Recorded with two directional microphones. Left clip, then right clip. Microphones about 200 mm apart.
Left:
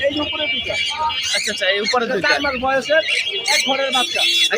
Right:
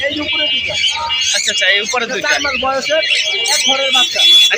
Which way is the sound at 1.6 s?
25° left (ahead or behind).